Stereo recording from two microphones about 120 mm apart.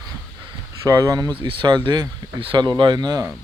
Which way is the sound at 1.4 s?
45° right (ahead or behind).